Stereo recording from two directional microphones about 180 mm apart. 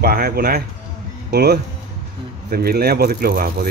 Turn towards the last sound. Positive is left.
turn(degrees=-55)  # may be behind; listen again after turning